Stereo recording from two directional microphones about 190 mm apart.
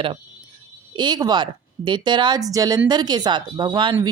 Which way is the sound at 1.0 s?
20° right (ahead or behind).